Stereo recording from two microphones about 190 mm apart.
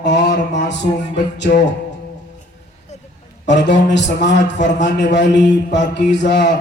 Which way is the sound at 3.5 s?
65° left (ahead or behind).